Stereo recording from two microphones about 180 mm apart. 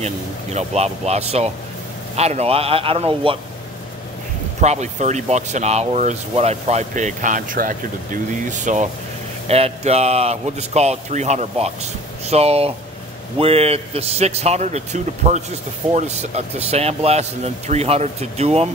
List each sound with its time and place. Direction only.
0.0 s speech: 40° right (ahead or behind)
4.6 s speech: 40° right (ahead or behind)